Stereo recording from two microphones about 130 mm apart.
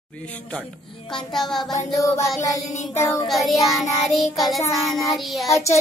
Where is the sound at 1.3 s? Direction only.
Centre (ahead or behind).